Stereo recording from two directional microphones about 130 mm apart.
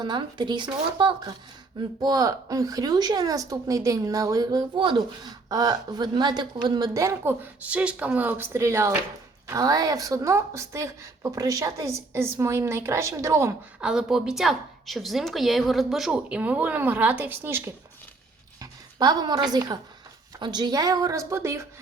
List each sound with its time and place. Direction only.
0.0 s a woman's voice: 35° right (ahead or behind)
13.8 s a woman's voice: 5° right (ahead or behind)
18.6 s a woman's voice: 30° right (ahead or behind)